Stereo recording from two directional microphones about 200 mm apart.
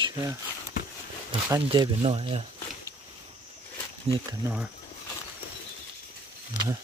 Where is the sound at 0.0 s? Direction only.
15° right (ahead or behind).